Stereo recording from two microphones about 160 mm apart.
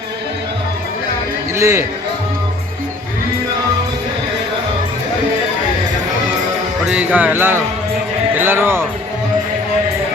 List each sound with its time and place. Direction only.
1.5 s speech: 20° right (ahead or behind)
6.8 s speech: 5° right (ahead or behind)